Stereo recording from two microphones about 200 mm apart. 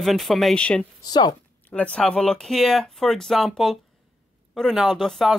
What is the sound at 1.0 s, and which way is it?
Speech, 20° left (ahead or behind).